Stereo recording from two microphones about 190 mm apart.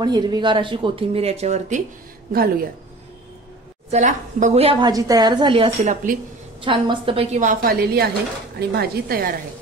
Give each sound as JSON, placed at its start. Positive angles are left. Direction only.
{"t": 0.0, "sound": "a woman's voice", "side_deg": -20}
{"t": 2.3, "sound": "a woman's voice", "side_deg": -50}
{"t": 3.9, "sound": "a woman's voice", "side_deg": -40}
{"t": 7.3, "sound": "a woman's voice", "side_deg": -45}